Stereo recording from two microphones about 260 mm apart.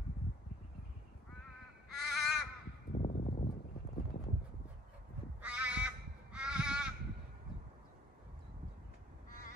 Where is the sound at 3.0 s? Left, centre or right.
Left.